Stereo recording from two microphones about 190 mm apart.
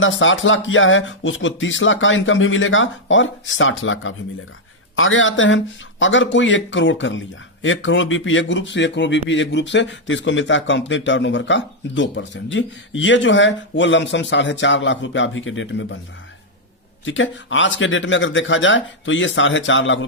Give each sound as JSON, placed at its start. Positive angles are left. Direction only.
{"t": 0.0, "sound": "speech", "side_deg": 90}
{"t": 7.6, "sound": "speech", "side_deg": 90}
{"t": 17.1, "sound": "speech", "side_deg": 80}